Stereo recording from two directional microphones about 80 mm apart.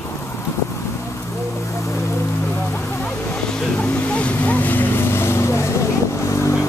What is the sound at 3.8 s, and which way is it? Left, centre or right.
Vehicle, centre.